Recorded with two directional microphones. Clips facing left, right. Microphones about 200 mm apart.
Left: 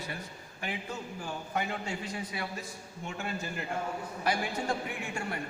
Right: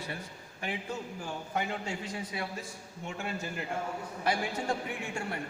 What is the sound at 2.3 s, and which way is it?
Speech, 25° right (ahead or behind).